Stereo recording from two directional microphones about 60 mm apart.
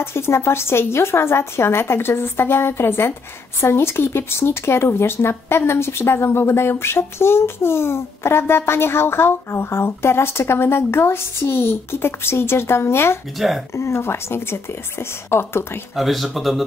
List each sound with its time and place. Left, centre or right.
0.0 s speech: left
13.4 s speech: centre
13.7 s speech: left
16.0 s speech: centre